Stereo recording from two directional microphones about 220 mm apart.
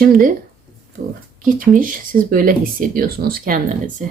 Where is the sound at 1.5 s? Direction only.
40° right (ahead or behind).